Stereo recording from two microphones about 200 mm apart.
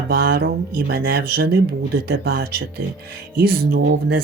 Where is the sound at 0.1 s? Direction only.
50° right (ahead or behind).